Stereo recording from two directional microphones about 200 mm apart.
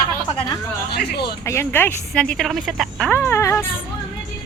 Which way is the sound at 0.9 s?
55° left (ahead or behind).